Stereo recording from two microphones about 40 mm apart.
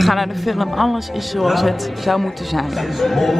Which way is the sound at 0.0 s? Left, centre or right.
Centre.